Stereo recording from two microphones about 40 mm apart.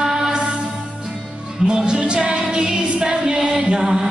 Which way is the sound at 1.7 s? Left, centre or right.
Right.